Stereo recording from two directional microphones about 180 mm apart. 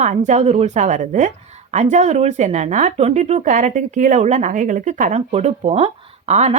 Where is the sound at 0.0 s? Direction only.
40° right (ahead or behind).